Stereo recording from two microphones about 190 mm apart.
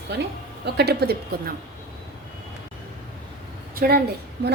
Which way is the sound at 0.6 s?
60° right (ahead or behind).